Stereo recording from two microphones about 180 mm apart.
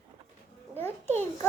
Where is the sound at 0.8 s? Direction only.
10° left (ahead or behind).